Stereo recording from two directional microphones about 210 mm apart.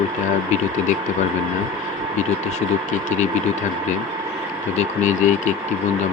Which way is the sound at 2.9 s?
35° left (ahead or behind).